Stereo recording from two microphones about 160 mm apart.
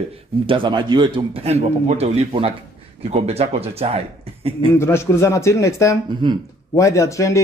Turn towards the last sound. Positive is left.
turn(degrees=20)  # may be behind; listen again after turning